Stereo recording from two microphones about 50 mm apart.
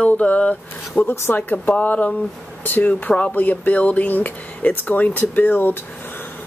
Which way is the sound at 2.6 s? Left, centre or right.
Left.